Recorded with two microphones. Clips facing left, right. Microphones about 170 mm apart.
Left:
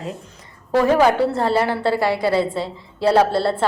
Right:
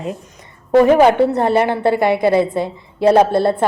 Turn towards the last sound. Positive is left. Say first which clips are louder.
# right 4 dB
turn(degrees=-20)  # may be behind; listen again after turning